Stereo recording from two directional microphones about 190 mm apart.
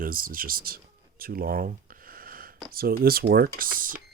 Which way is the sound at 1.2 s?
50° right (ahead or behind).